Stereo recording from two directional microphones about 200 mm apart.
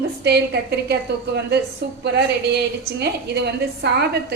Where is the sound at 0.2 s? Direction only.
55° right (ahead or behind).